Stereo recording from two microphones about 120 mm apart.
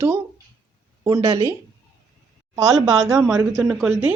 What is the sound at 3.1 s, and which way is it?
Speech, 5° right (ahead or behind).